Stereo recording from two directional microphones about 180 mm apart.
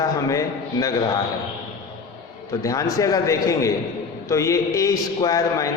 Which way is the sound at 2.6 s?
20° left (ahead or behind).